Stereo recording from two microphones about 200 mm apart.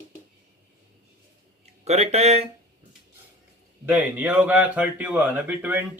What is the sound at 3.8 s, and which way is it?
Speech, 10° right (ahead or behind).